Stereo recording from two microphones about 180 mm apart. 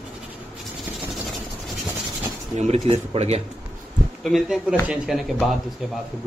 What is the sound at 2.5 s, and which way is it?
Speech, 40° right (ahead or behind).